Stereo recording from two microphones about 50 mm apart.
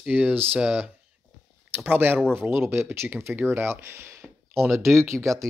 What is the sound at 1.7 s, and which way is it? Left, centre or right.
Speech, right.